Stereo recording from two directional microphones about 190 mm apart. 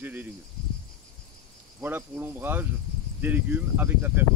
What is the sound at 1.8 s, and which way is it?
Speech, 10° right (ahead or behind).